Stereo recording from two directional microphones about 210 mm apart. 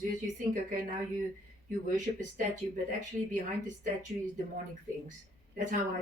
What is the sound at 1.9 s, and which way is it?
Speech, 35° right (ahead or behind).